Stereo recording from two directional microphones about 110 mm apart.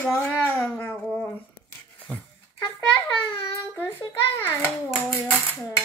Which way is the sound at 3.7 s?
20° left (ahead or behind).